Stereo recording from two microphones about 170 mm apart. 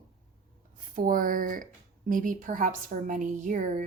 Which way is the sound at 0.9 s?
55° right (ahead or behind).